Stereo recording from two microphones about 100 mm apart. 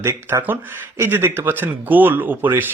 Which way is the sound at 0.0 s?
30° right (ahead or behind).